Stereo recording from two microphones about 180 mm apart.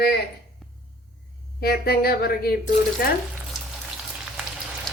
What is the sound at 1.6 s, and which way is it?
A woman's voice, 60° left (ahead or behind).